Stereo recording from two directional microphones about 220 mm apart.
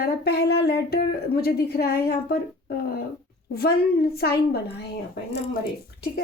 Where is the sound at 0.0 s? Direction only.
45° left (ahead or behind).